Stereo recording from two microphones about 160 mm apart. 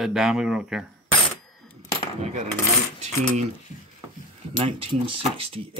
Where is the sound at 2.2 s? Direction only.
50° right (ahead or behind).